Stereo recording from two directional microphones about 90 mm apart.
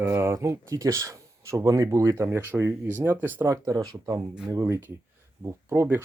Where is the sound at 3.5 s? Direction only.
40° right (ahead or behind).